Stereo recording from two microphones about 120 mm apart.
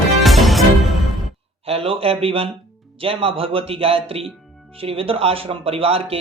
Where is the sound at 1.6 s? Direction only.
50° right (ahead or behind).